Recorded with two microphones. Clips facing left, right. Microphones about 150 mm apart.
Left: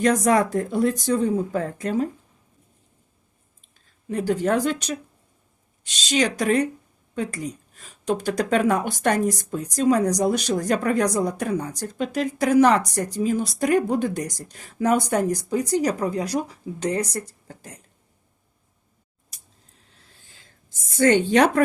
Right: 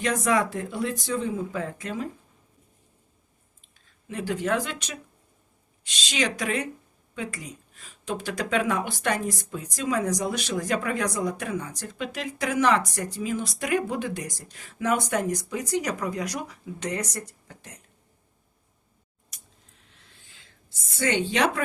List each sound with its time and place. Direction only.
0.0 s speech: 40° left (ahead or behind)
3.8 s speech: 40° left (ahead or behind)
6.1 s speech: 40° left (ahead or behind)
19.3 s a sound: 35° left (ahead or behind)